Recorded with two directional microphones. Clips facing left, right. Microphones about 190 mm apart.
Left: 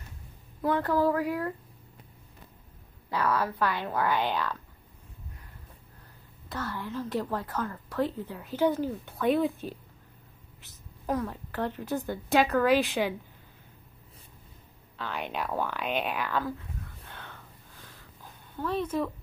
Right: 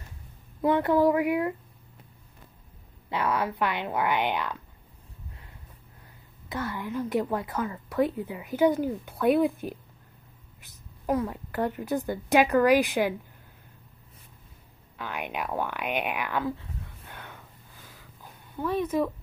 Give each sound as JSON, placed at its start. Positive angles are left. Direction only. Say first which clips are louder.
{"t": 0.6, "sound": "speech", "louder": "right 4 dB", "side_deg": -20}
{"t": 3.1, "sound": "speech", "louder": "even", "side_deg": -20}
{"t": 6.5, "sound": "a woman's voice", "louder": "right 3 dB", "side_deg": -15}
{"t": 11.1, "sound": "a woman's voice", "louder": "right 3 dB", "side_deg": -5}
{"t": 15.0, "sound": "a woman's voice", "louder": "even", "side_deg": -10}
{"t": 17.1, "sound": "a sound", "louder": "right 1 dB", "side_deg": -15}